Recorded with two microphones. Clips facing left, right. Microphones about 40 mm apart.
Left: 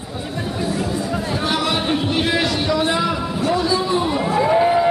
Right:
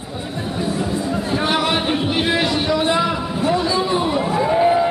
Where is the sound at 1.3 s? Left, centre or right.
Right.